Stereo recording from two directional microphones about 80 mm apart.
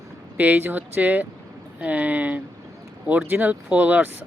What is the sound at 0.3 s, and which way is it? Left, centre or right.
Speech, centre.